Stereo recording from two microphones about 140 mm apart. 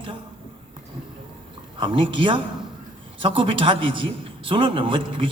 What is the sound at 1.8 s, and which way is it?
A man's voice, 35° right (ahead or behind).